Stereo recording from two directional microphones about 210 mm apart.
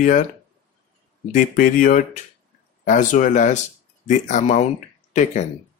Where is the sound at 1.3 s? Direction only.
40° left (ahead or behind).